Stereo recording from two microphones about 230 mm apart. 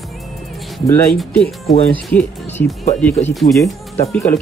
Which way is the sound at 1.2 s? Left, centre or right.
Centre.